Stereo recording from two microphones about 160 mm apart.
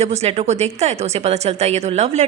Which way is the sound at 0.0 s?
40° right (ahead or behind).